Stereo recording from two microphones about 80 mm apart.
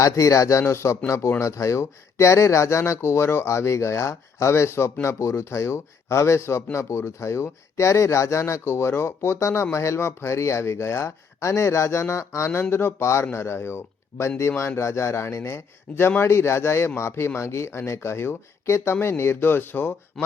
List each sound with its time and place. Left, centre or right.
0.0 s a man's voice: left